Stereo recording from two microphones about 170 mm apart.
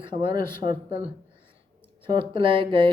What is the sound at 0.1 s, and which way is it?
Speech, 30° right (ahead or behind).